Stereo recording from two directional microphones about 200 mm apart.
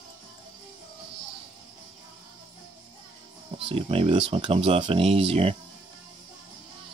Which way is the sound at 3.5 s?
30° right (ahead or behind).